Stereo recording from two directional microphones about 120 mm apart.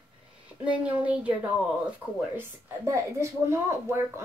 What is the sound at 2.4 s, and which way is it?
A woman's voice, 25° right (ahead or behind).